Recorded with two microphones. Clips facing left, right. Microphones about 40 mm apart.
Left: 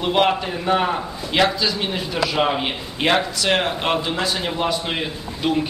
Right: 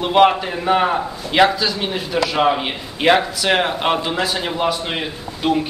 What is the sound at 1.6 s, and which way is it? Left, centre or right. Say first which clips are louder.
A man's voice: right 1 dB; centre.